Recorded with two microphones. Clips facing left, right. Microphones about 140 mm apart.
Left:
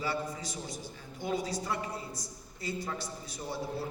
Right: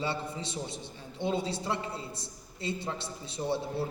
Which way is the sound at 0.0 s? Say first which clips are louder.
Right 1 dB; 25° right (ahead or behind).